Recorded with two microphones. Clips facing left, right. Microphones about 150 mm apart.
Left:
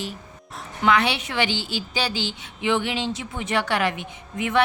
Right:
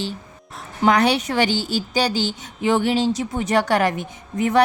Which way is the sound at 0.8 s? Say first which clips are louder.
Right 4 dB; 40° right (ahead or behind).